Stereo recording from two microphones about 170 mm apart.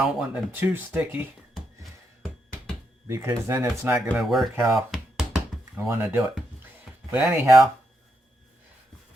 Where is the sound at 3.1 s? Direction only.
15° right (ahead or behind).